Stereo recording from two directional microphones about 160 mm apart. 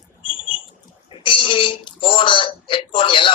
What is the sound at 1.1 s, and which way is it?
Speech, 35° left (ahead or behind).